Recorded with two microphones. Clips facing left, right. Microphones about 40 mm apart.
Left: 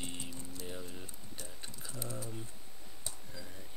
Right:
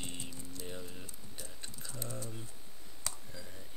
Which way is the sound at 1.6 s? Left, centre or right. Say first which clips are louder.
Even; centre.